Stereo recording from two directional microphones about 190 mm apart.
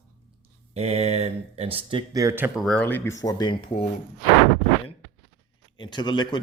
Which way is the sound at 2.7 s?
5° left (ahead or behind).